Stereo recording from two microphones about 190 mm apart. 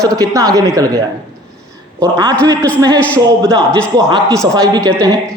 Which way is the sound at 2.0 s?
20° right (ahead or behind).